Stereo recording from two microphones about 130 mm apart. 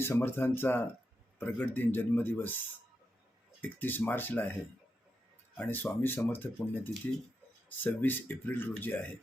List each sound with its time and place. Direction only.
0.0 s speech: 20° left (ahead or behind)
3.6 s speech: 15° left (ahead or behind)
5.5 s speech: 15° left (ahead or behind)